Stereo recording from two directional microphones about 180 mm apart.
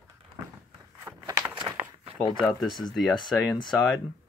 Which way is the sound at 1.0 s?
15° right (ahead or behind).